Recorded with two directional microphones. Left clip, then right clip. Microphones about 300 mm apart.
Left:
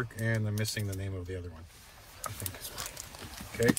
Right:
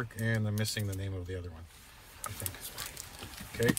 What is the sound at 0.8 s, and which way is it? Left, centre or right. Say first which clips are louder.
Speech: left 1 dB; right.